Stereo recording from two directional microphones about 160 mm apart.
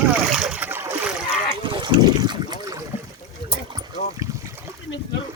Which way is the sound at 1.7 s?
25° right (ahead or behind).